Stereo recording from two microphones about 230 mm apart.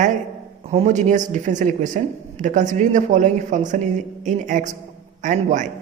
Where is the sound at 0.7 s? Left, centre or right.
Right.